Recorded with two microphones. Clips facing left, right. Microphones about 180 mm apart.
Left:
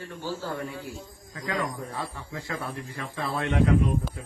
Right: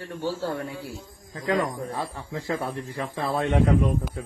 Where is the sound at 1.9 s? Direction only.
25° right (ahead or behind).